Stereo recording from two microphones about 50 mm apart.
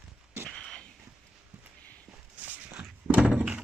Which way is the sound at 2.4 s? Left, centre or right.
Right.